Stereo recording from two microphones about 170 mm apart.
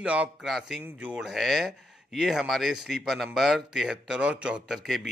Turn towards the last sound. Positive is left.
turn(degrees=0)  # may be behind; listen again after turning